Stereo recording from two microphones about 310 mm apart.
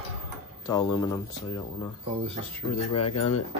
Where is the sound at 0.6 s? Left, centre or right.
Centre.